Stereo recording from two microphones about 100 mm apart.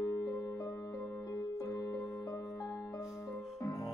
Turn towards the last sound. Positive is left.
turn(degrees=35)  # may be behind; listen again after turning